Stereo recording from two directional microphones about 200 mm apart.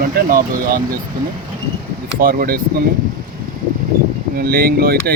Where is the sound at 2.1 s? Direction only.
45° right (ahead or behind).